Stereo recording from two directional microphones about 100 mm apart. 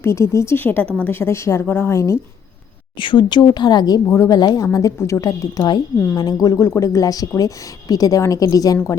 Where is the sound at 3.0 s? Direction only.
55° left (ahead or behind).